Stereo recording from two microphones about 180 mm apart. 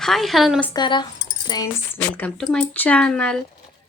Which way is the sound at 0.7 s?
25° left (ahead or behind).